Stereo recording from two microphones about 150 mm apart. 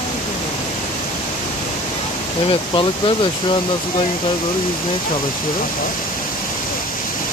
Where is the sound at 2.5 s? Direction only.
35° left (ahead or behind).